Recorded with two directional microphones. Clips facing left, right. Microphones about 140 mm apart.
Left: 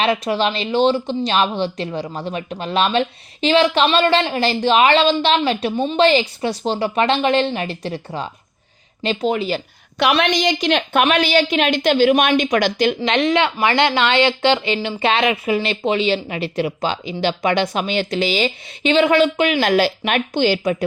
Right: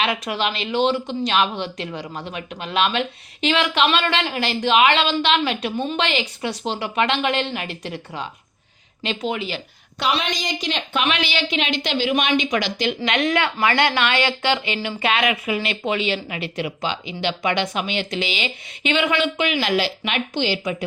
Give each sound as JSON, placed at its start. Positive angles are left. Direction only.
{"t": 0.0, "sound": "a woman's voice", "side_deg": 35}
{"t": 10.0, "sound": "a woman's voice", "side_deg": 70}
{"t": 13.1, "sound": "a woman's voice", "side_deg": 25}